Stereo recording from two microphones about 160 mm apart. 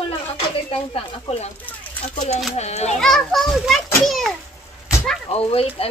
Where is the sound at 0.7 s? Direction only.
40° left (ahead or behind).